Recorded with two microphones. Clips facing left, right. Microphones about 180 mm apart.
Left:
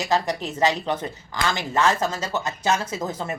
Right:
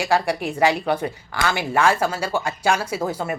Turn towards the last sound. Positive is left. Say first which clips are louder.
# right 4 dB
turn(degrees=-10)  # may be behind; listen again after turning